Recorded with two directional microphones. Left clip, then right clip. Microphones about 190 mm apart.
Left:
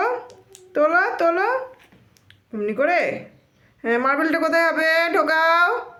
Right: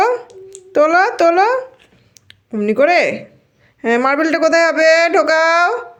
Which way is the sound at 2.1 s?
35° right (ahead or behind).